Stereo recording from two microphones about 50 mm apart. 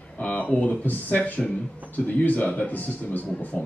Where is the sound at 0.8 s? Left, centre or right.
Left.